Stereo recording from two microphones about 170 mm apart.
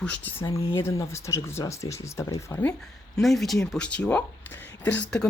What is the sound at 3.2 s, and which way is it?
A woman's voice, centre (ahead or behind).